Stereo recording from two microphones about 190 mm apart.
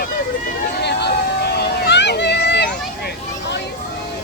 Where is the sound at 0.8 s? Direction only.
60° left (ahead or behind).